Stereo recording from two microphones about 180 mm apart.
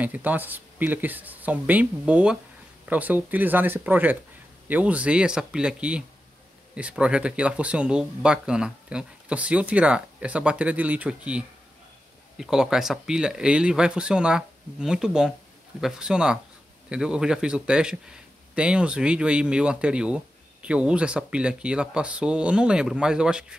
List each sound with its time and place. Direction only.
0.0 s a man's voice: 10° right (ahead or behind)